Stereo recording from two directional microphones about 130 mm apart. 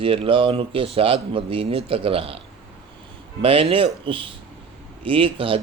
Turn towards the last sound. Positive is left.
turn(degrees=-45)  # may be behind; listen again after turning